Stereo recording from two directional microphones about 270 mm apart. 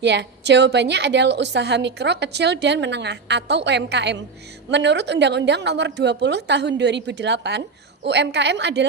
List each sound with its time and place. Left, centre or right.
0.0 s a woman's voice: right